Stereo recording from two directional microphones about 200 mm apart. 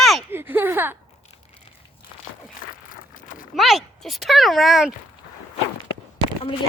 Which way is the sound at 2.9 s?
45° left (ahead or behind).